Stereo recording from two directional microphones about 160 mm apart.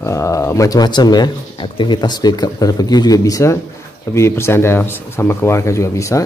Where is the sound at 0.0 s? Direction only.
20° left (ahead or behind).